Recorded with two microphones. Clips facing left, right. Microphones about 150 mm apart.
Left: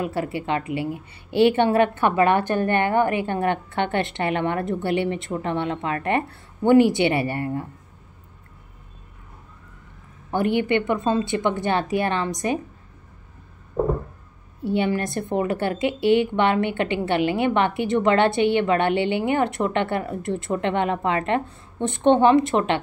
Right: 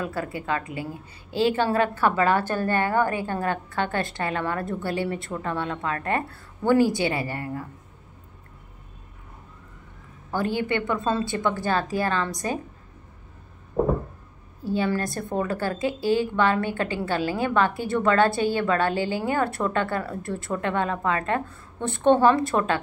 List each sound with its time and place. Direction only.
0.0 s a woman's voice: 25° left (ahead or behind)
10.3 s a woman's voice: 20° left (ahead or behind)
14.6 s a woman's voice: 25° left (ahead or behind)